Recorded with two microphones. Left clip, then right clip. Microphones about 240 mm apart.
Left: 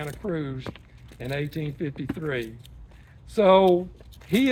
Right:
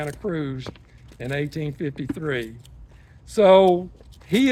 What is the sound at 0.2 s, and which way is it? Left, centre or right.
Speech, right.